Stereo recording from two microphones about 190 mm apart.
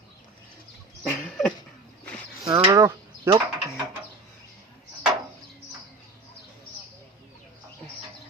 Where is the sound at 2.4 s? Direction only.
25° right (ahead or behind).